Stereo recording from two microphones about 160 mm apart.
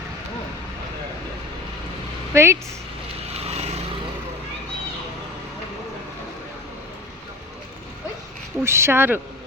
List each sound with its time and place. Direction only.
2.3 s speech: 15° right (ahead or behind)
3.3 s vehicle: 40° right (ahead or behind)
8.6 s speech: 15° right (ahead or behind)